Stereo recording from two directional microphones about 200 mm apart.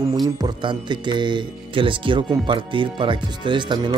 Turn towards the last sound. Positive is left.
turn(degrees=-20)  # may be behind; listen again after turning